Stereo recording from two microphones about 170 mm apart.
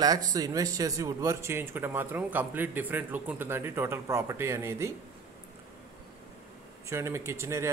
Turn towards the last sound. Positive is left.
turn(degrees=-15)  # may be behind; listen again after turning